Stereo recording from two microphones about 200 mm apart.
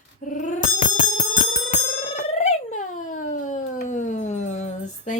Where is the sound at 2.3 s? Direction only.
35° left (ahead or behind).